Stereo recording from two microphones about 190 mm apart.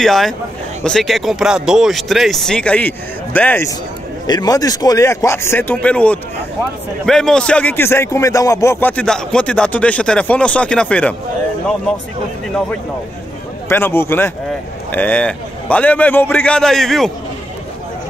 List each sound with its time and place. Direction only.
0.0 s a man's voice: centre (ahead or behind)
13.7 s a man's voice: 10° left (ahead or behind)